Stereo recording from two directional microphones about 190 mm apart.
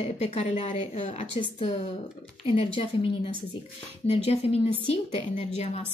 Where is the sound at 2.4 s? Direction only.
30° left (ahead or behind).